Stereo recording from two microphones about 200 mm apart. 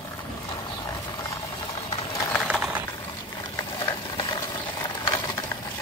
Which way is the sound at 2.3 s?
5° left (ahead or behind).